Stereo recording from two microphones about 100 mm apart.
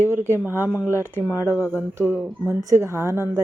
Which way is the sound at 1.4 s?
25° left (ahead or behind).